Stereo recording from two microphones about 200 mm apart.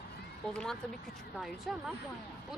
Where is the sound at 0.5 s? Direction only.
Centre (ahead or behind).